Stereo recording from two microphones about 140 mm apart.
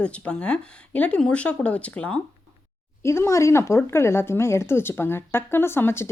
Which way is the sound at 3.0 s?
20° left (ahead or behind).